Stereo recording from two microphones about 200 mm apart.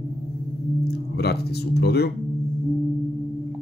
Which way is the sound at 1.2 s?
55° left (ahead or behind).